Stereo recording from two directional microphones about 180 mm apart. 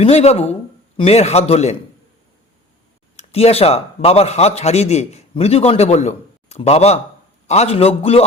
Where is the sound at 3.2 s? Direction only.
35° left (ahead or behind).